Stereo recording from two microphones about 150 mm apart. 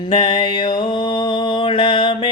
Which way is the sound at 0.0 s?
35° left (ahead or behind).